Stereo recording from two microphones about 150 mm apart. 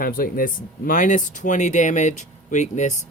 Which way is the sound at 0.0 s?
75° left (ahead or behind).